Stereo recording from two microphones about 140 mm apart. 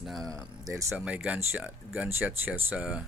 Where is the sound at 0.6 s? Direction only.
20° right (ahead or behind).